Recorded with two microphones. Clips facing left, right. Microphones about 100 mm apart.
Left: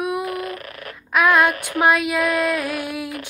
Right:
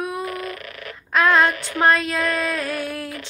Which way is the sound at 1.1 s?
10° left (ahead or behind).